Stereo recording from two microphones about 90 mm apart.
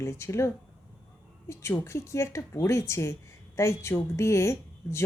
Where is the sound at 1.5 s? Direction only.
30° left (ahead or behind).